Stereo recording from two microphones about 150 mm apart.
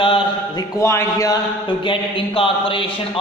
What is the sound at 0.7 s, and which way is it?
Speech, 20° left (ahead or behind).